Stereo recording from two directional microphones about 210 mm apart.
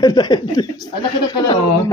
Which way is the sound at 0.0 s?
20° left (ahead or behind).